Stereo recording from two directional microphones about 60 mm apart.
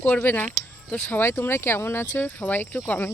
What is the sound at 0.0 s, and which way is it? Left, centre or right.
Speech, left.